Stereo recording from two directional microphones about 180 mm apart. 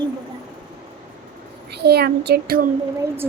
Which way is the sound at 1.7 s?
65° right (ahead or behind).